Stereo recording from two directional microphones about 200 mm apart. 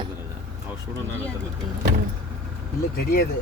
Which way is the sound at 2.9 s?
50° left (ahead or behind).